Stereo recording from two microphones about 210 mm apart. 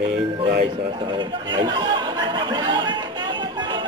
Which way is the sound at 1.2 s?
20° right (ahead or behind).